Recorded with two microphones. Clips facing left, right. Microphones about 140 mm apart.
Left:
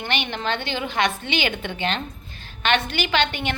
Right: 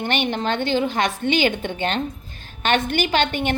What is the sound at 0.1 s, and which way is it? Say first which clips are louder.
A woman's voice: right 2 dB; 45° right (ahead or behind).